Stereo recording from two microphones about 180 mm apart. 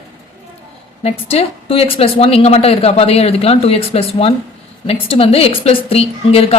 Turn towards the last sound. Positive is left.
turn(degrees=35)  # may be behind; listen again after turning